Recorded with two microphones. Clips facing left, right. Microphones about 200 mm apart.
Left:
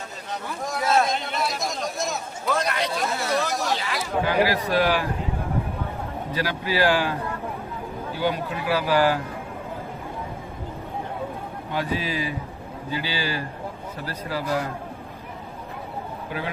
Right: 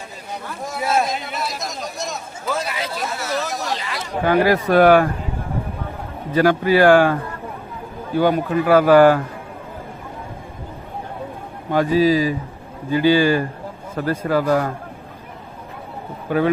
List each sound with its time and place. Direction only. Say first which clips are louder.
0.6 s a sound: right 1 dB; 5° right (ahead or behind)
4.3 s a man's voice: right 8 dB; 50° right (ahead or behind)
6.3 s a man's voice: right 11 dB; 50° right (ahead or behind)
8.2 s a man's voice: right 8 dB; 50° right (ahead or behind)
11.7 s a man's voice: right 12 dB; 45° right (ahead or behind)
12.9 s a man's voice: right 14 dB; 50° right (ahead or behind)